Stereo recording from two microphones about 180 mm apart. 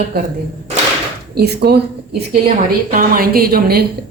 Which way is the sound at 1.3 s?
65° right (ahead or behind).